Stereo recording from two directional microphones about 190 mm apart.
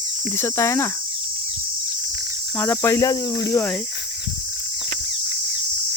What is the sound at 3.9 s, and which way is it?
Cricket, 65° left (ahead or behind).